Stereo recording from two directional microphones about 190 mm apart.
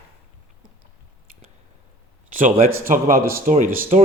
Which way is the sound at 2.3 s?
45° right (ahead or behind).